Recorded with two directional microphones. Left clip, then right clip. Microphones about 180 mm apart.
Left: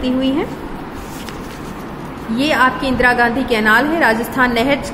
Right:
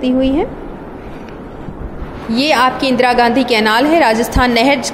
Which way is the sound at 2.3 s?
20° right (ahead or behind).